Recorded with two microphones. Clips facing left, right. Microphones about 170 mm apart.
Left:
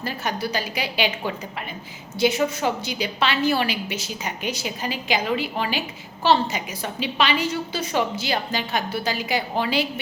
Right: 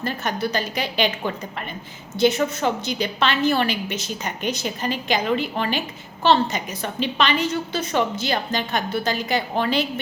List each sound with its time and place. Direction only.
0.0 s a woman's voice: 10° left (ahead or behind)